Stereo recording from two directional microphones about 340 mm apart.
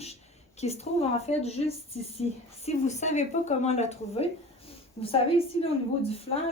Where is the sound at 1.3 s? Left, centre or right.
Centre.